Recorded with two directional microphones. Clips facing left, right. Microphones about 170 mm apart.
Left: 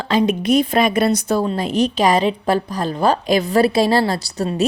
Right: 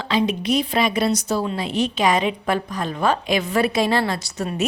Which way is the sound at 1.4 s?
40° left (ahead or behind).